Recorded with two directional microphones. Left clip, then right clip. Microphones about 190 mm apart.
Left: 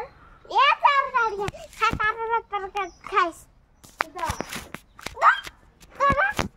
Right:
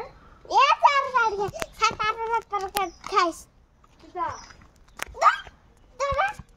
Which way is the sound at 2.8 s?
85° right.